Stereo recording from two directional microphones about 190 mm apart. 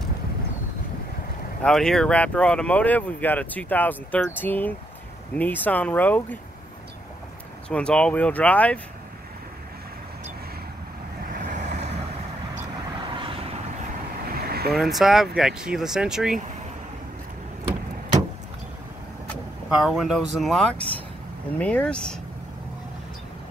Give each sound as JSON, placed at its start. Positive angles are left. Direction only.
{"t": 1.6, "sound": "speech", "side_deg": 5}
{"t": 7.7, "sound": "speech", "side_deg": 5}
{"t": 11.3, "sound": "vehicle", "side_deg": -40}
{"t": 13.1, "sound": "vehicle", "side_deg": -30}
{"t": 14.4, "sound": "vehicle", "side_deg": -55}
{"t": 14.7, "sound": "speech", "side_deg": 0}
{"t": 19.7, "sound": "speech", "side_deg": 0}